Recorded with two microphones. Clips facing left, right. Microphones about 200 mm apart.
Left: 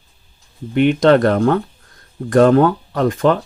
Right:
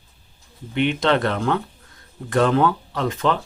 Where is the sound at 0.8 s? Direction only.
45° left (ahead or behind).